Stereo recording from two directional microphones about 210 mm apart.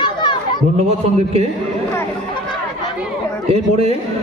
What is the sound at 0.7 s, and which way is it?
Speech, 30° right (ahead or behind).